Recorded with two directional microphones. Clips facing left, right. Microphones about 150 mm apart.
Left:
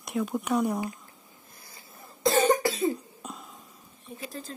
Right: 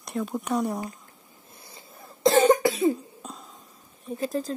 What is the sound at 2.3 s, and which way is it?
Cough, 20° right (ahead or behind).